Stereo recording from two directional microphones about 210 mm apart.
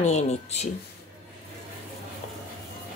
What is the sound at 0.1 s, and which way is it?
Speech, 30° left (ahead or behind).